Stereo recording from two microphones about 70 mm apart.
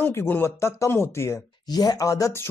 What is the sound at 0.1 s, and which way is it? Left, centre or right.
Speech, left.